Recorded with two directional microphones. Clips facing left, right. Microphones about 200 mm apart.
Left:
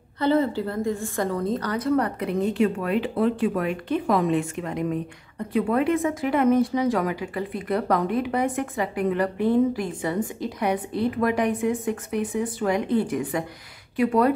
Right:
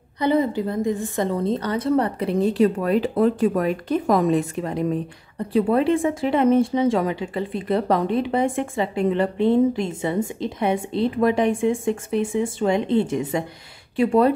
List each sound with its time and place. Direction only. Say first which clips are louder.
0.2 s speech: right 1 dB; 15° right (ahead or behind)